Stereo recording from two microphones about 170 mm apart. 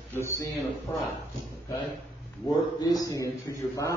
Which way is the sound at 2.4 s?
20° left (ahead or behind).